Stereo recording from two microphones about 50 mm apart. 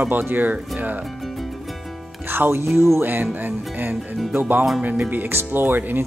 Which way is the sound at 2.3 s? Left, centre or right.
Right.